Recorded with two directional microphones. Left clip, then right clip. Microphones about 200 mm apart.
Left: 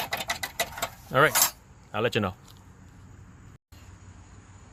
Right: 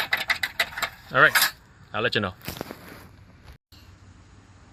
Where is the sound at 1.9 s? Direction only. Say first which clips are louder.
Right 2 dB; 5° left (ahead or behind).